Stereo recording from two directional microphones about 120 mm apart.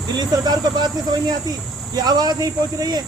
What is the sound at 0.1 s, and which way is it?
Speech, 35° right (ahead or behind).